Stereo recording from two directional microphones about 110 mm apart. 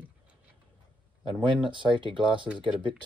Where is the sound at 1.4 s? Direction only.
50° right (ahead or behind).